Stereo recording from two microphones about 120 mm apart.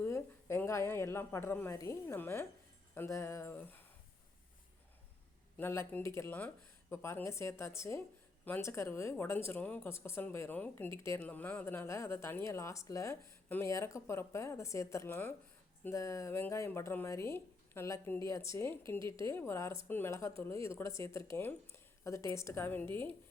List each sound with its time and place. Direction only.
0.0 s a woman's voice: 20° left (ahead or behind)
5.5 s speech: 20° left (ahead or behind)